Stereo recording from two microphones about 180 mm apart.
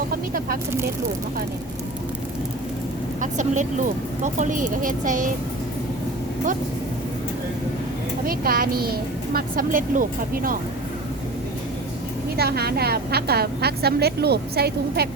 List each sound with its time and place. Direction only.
0.3 s a woman's voice: 55° right (ahead or behind)
3.2 s a woman's voice: 45° right (ahead or behind)
8.3 s a woman's voice: 55° right (ahead or behind)
12.4 s a woman's voice: 60° right (ahead or behind)